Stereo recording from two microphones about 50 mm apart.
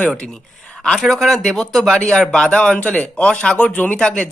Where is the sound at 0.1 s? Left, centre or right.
Centre.